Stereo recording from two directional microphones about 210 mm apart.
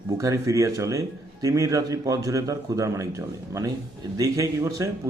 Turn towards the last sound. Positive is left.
turn(degrees=-15)  # may be behind; listen again after turning